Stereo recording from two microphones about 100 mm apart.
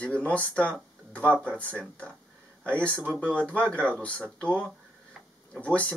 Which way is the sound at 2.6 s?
15° left (ahead or behind).